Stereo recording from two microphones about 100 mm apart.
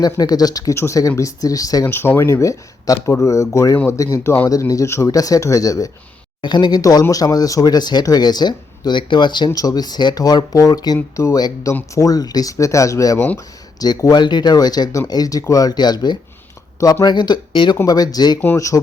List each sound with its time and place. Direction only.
0.0 s speech: 40° left (ahead or behind)
1.8 s speech: 25° left (ahead or behind)
6.4 s speech: 50° left (ahead or behind)
9.5 s speech: 35° left (ahead or behind)
10.9 s speech: 20° left (ahead or behind)
11.3 s speech: 40° left (ahead or behind)
13.1 s speech: 20° left (ahead or behind)
13.7 s speech: 40° left (ahead or behind)
17.8 s speech: 40° left (ahead or behind)